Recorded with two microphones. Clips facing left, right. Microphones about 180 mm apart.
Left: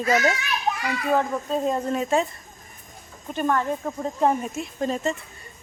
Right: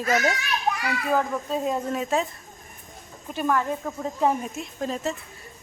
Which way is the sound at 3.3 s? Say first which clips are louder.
Left 1 dB; 5° right (ahead or behind).